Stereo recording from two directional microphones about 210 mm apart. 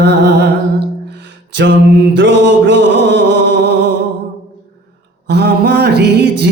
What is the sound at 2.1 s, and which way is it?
Music, 60° right (ahead or behind).